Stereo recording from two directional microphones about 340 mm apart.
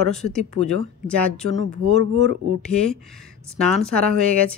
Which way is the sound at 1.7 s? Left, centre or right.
Centre.